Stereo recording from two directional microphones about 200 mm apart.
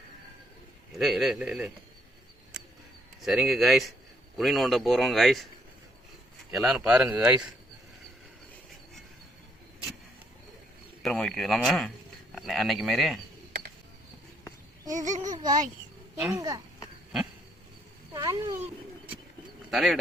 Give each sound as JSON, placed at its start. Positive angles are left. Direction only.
{"t": 0.9, "sound": "speech", "side_deg": 0}
{"t": 3.2, "sound": "speech", "side_deg": 0}
{"t": 6.7, "sound": "speech", "side_deg": -5}
{"t": 11.0, "sound": "speech", "side_deg": 5}
{"t": 14.9, "sound": "babbling", "side_deg": -40}
{"t": 15.2, "sound": "speech", "side_deg": -20}
{"t": 18.1, "sound": "speech", "side_deg": -20}
{"t": 19.7, "sound": "speech", "side_deg": 0}